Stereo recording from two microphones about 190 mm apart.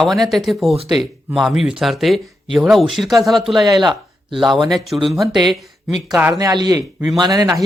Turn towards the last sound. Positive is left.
turn(degrees=-20)  # may be behind; listen again after turning